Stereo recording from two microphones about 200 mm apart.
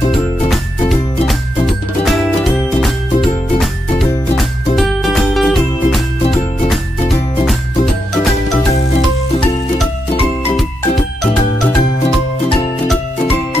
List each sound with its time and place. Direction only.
0.5 s music: centre (ahead or behind)
4.7 s music: centre (ahead or behind)
8.7 s music: 30° left (ahead or behind)